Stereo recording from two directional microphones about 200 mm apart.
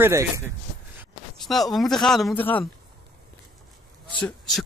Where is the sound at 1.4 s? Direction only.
Centre (ahead or behind).